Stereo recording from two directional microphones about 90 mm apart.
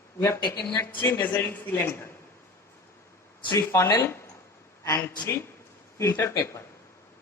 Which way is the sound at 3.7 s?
35° left (ahead or behind).